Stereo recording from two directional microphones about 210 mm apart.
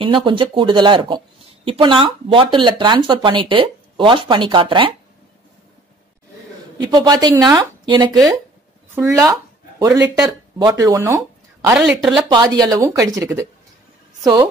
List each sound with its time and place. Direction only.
0.0 s speech: 25° right (ahead or behind)
6.8 s speech: 20° right (ahead or behind)
11.8 s speech: centre (ahead or behind)
12.3 s a woman's voice: 20° right (ahead or behind)